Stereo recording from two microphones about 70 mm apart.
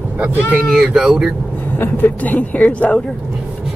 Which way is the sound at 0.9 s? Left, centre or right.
Centre.